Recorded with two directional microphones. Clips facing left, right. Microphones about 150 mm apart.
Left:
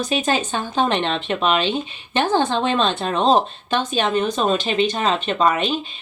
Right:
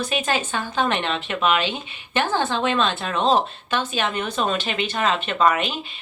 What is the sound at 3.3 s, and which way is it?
Speech, 15° left (ahead or behind).